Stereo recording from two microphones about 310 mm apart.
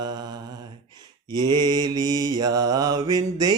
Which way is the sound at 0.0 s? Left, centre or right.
Centre.